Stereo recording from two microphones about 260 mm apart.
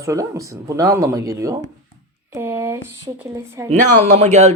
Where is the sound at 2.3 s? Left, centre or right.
Centre.